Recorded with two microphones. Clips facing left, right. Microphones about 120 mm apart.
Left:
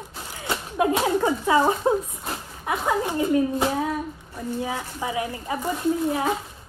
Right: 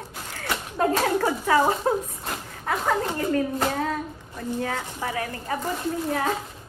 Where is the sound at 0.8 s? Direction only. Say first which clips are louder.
Left 1 dB; 15° left (ahead or behind).